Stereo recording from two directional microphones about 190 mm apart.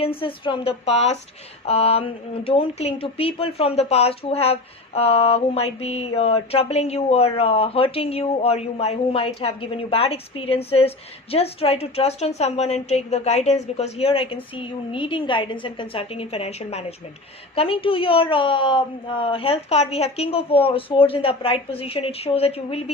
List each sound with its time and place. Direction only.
0.0 s a woman's voice: 30° left (ahead or behind)
1.6 s a sound: 30° left (ahead or behind)
14.5 s a woman's voice: 25° left (ahead or behind)